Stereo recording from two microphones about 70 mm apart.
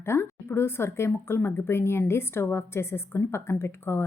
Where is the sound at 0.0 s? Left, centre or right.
Left.